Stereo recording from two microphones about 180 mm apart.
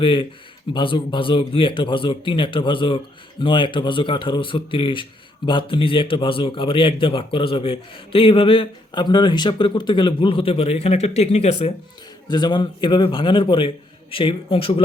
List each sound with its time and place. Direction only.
0.0 s a man's voice: 30° left (ahead or behind)
12.3 s a man's voice: 25° left (ahead or behind)